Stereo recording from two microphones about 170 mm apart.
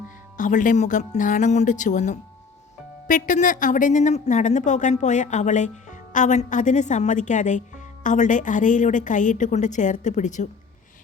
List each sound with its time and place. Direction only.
0.3 s a woman's voice: 50° left (ahead or behind)